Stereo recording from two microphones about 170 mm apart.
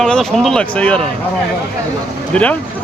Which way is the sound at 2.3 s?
10° left (ahead or behind).